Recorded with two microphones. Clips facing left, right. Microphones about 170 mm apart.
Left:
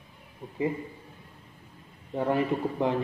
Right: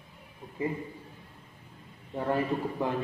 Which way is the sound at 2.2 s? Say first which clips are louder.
Left 3 dB; 20° left (ahead or behind).